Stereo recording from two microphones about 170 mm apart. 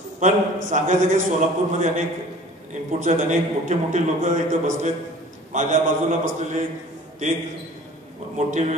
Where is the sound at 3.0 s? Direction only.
45° right (ahead or behind).